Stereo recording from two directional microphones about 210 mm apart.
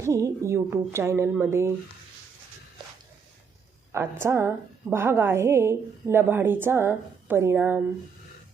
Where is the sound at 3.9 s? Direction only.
15° right (ahead or behind).